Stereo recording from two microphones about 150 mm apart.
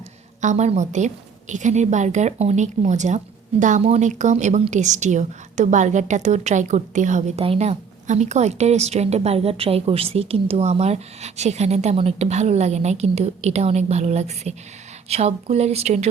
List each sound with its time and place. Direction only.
0.4 s a woman's voice: 50° right (ahead or behind)